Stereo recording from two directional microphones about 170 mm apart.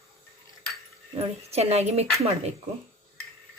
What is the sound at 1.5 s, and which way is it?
Speech, 40° right (ahead or behind).